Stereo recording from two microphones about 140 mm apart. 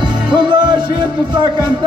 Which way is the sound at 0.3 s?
35° right (ahead or behind).